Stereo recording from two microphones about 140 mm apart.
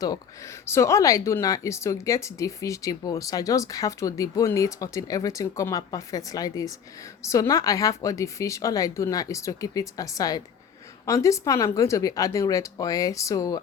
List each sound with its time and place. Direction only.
0.6 s speech: 20° left (ahead or behind)